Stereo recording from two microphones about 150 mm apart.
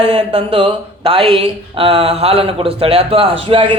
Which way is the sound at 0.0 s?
35° right (ahead or behind).